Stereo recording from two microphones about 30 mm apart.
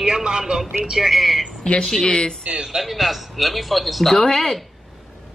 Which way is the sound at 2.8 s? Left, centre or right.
Centre.